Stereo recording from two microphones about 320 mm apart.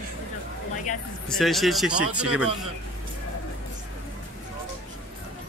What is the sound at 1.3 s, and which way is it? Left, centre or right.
A man's voice, centre.